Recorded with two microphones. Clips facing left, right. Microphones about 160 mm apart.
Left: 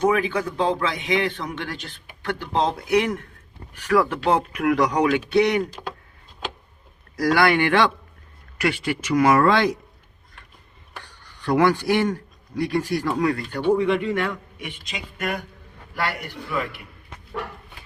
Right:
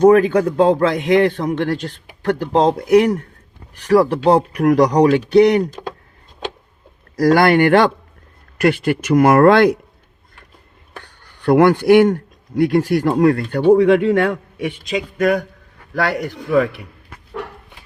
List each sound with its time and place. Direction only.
0.0 s a man's voice: 45° right (ahead or behind)
7.2 s a man's voice: 45° right (ahead or behind)
11.2 s a man's voice: 55° right (ahead or behind)
13.7 s a man's voice: 75° right (ahead or behind)